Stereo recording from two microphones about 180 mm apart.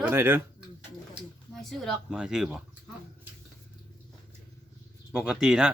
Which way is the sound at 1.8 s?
Centre (ahead or behind).